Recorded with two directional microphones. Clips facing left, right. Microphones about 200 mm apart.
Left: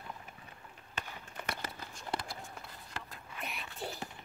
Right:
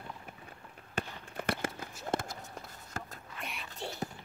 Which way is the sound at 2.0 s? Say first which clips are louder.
Right 5 dB; 45° right (ahead or behind).